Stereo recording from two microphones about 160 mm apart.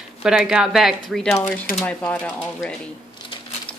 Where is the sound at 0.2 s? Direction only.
5° right (ahead or behind).